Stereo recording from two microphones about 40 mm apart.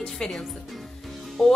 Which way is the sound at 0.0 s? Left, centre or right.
Centre.